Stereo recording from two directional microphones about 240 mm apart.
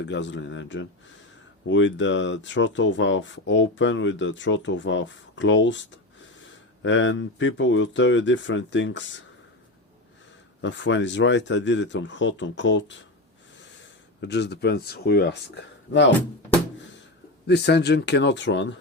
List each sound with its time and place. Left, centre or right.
0.0 s speech: left
6.8 s speech: left
10.6 s speech: left
14.2 s speech: left
17.4 s speech: left